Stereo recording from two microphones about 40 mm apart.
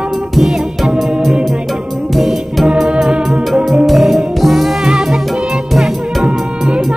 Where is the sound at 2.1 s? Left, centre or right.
Centre.